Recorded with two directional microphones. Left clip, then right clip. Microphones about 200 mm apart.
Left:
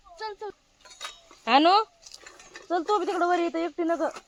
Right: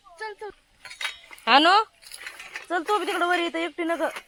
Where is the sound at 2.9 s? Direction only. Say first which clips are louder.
Right 1 dB; 15° right (ahead or behind).